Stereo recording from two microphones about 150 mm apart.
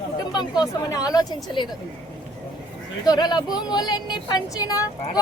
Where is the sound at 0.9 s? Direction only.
25° left (ahead or behind).